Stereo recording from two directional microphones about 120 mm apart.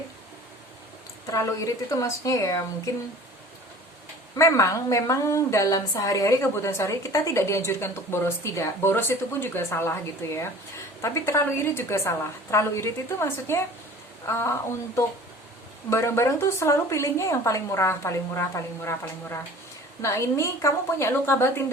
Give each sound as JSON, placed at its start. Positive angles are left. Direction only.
{"t": 1.3, "sound": "a woman's voice", "side_deg": 25}
{"t": 4.4, "sound": "a woman's voice", "side_deg": 25}